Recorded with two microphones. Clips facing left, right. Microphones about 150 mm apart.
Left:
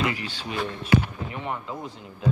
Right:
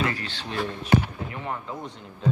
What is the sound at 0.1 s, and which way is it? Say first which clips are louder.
Speech: left 1 dB; 10° left (ahead or behind).